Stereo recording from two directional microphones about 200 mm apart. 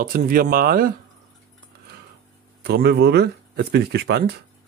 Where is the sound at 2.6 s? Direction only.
55° right (ahead or behind).